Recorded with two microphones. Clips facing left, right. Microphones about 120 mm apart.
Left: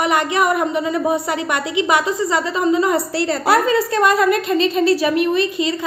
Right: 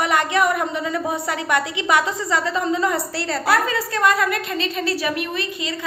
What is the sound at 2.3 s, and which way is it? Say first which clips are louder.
A woman's voice: left 4 dB; 15° left (ahead or behind).